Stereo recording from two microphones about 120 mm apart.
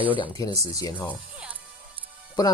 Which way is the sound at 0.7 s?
30° left (ahead or behind).